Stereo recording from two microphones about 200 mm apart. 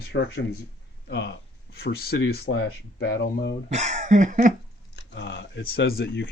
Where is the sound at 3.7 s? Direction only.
35° right (ahead or behind).